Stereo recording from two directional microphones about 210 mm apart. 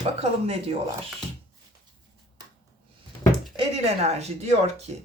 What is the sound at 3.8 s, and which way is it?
Speech, 30° right (ahead or behind).